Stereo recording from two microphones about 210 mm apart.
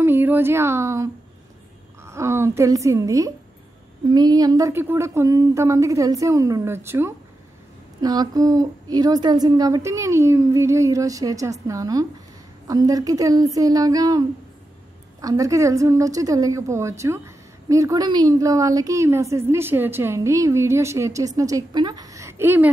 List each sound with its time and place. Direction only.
0.0 s a woman's voice: 10° right (ahead or behind)
15.2 s a woman's voice: 15° right (ahead or behind)